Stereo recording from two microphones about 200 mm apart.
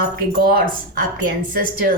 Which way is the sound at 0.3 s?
50° right (ahead or behind).